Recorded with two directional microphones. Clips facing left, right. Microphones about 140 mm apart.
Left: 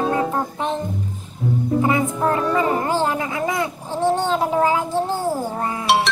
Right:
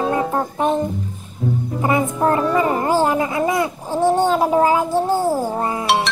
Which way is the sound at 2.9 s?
15° right (ahead or behind).